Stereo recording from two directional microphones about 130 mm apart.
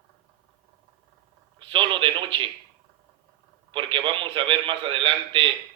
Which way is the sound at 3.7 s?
40° right (ahead or behind).